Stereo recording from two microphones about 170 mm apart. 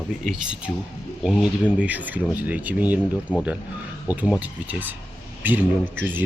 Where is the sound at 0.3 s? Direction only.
5° right (ahead or behind).